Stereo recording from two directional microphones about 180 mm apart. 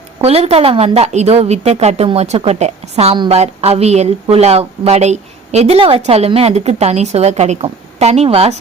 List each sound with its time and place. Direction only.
0.2 s a woman's voice: 35° right (ahead or behind)